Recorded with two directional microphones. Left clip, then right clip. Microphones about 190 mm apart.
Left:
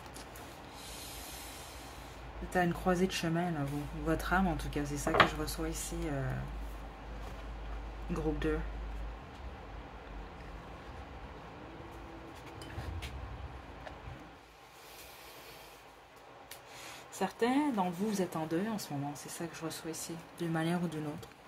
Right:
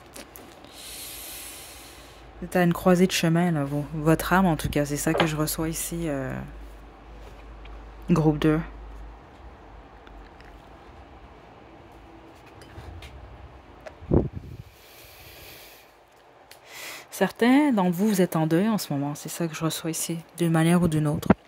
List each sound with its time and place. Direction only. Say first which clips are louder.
2.5 s speech: right 10 dB; 45° right (ahead or behind)
8.1 s speech: right 13 dB; 50° right (ahead or behind)
16.8 s speech: right 11 dB; 50° right (ahead or behind)